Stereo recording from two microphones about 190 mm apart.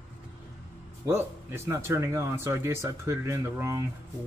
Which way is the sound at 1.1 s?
10° right (ahead or behind).